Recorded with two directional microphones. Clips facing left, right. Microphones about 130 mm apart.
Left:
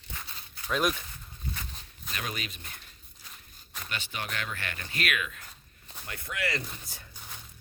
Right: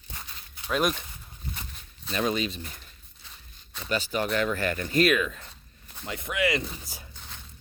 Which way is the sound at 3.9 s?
40° right (ahead or behind).